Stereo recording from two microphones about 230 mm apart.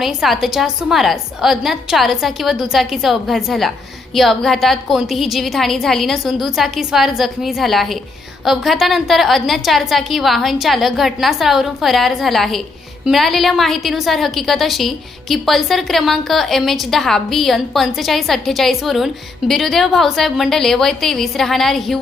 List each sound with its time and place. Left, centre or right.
0.0 s a woman's voice: centre